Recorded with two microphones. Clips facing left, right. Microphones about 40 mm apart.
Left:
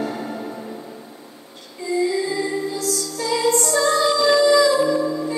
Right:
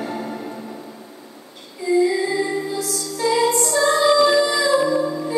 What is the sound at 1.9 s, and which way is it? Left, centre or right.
Music, right.